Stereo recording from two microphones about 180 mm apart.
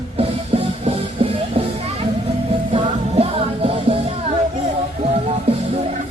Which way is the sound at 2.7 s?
30° right (ahead or behind).